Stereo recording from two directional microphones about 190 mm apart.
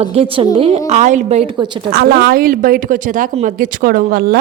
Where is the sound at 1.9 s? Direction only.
55° right (ahead or behind).